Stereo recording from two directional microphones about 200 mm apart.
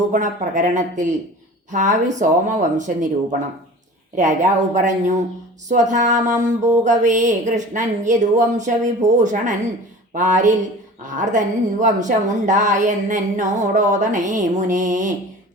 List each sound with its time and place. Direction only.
0.1 s a woman's voice: 40° right (ahead or behind)
4.1 s a woman's voice: 40° right (ahead or behind)